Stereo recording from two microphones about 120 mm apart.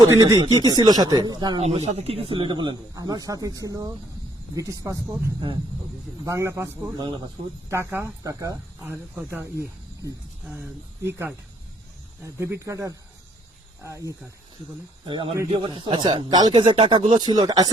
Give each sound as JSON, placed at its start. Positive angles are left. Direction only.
{"t": 0.0, "sound": "speech", "side_deg": -30}
{"t": 1.6, "sound": "speech", "side_deg": -60}
{"t": 6.2, "sound": "speech", "side_deg": -25}
{"t": 8.2, "sound": "speech", "side_deg": -30}
{"t": 8.8, "sound": "speech", "side_deg": -15}
{"t": 15.0, "sound": "speech", "side_deg": -45}